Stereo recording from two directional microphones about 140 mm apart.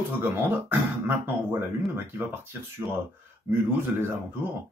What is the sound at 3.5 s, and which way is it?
Speech, 15° right (ahead or behind).